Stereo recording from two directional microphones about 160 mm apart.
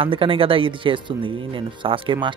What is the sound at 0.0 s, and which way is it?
Speech, 35° right (ahead or behind).